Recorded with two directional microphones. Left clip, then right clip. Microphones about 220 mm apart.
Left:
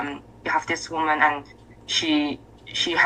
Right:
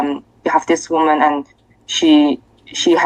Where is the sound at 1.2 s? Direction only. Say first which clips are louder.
Right 6 dB; 20° right (ahead or behind).